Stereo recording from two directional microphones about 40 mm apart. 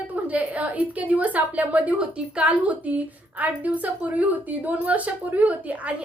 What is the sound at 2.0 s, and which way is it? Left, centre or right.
A woman's voice, right.